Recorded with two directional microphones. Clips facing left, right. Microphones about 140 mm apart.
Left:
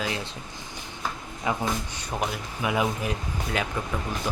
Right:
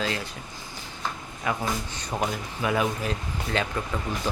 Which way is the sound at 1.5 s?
20° left (ahead or behind).